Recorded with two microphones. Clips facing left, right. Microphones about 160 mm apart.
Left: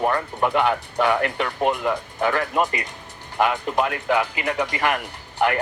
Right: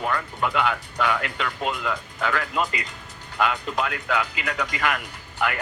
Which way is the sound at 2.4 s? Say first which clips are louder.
Left 4 dB; 45° left (ahead or behind).